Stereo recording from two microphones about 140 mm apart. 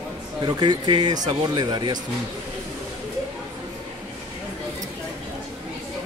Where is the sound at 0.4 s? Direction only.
30° right (ahead or behind).